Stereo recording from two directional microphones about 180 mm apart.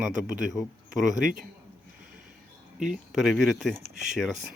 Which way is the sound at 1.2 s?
45° right (ahead or behind).